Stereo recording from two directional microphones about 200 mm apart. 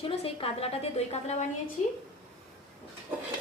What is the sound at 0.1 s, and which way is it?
A woman's voice, 30° left (ahead or behind).